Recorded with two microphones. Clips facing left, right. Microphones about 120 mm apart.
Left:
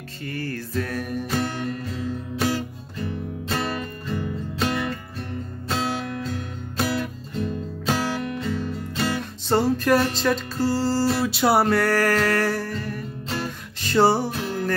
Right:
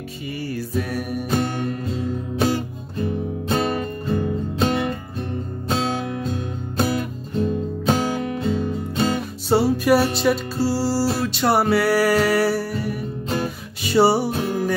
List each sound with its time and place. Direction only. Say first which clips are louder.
0.3 s music: right 3 dB; 10° right (ahead or behind)
1.3 s music: right 5 dB; 20° right (ahead or behind)
9.5 s music: right 3 dB; 10° right (ahead or behind)